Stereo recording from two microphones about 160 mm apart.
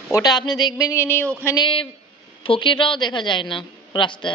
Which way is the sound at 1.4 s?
25° left (ahead or behind).